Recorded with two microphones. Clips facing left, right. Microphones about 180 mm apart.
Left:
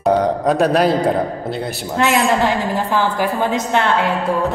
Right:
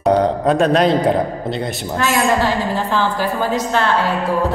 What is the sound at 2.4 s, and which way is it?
A woman's voice, 15° left (ahead or behind).